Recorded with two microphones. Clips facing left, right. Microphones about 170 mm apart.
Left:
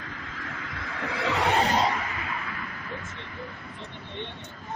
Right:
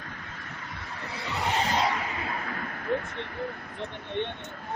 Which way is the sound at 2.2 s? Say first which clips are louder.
Right 2 dB; 40° right (ahead or behind).